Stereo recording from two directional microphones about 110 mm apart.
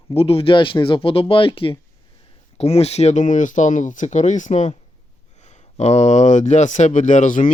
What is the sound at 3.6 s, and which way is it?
Speech, 90° left.